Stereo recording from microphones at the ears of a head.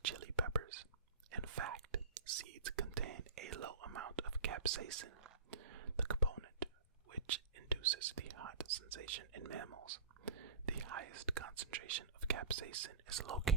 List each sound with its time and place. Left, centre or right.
0.0 s whispering: right